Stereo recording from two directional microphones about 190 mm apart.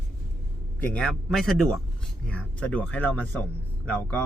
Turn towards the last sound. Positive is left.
turn(degrees=10)  # may be behind; listen again after turning